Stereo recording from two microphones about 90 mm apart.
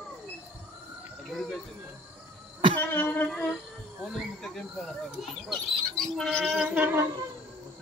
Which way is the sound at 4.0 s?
5° left (ahead or behind).